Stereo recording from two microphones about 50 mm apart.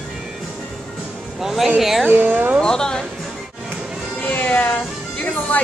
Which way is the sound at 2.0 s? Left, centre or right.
Right.